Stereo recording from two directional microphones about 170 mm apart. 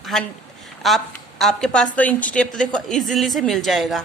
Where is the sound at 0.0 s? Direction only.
Centre (ahead or behind).